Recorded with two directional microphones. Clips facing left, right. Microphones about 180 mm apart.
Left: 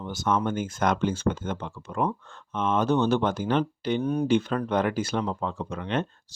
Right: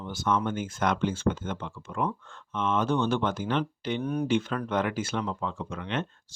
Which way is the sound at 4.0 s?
25° left (ahead or behind).